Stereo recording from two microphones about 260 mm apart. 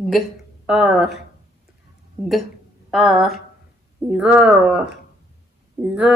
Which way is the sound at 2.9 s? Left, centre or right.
Centre.